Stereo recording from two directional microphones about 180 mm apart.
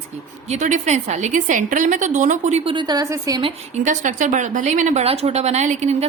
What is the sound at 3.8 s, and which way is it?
A woman's voice, 45° right (ahead or behind).